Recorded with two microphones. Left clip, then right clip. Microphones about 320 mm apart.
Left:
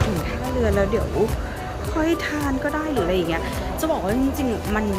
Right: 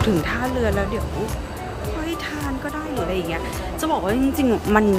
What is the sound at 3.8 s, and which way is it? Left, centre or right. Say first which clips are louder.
Speech: right 2 dB; centre.